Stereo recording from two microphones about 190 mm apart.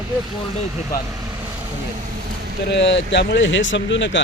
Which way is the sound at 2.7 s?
70° left (ahead or behind).